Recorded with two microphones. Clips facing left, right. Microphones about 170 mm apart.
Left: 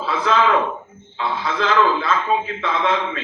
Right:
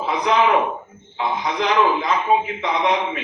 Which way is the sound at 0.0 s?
15° right (ahead or behind).